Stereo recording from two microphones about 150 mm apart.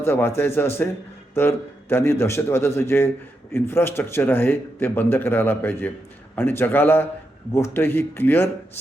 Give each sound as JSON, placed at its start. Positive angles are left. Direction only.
{"t": 0.0, "sound": "speech", "side_deg": 15}